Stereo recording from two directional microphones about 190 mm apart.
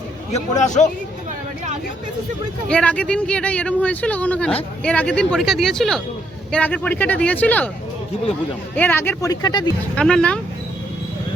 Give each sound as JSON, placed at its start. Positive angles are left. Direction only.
{"t": 0.3, "sound": "a man's voice", "side_deg": 35}
{"t": 2.6, "sound": "speech", "side_deg": 5}
{"t": 8.7, "sound": "speech", "side_deg": 10}
{"t": 9.9, "sound": "speech", "side_deg": 5}